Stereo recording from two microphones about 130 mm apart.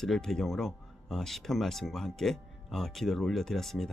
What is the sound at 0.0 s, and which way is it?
Speech, 5° left (ahead or behind).